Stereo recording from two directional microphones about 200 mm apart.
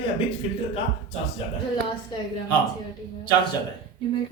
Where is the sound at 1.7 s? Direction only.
20° left (ahead or behind).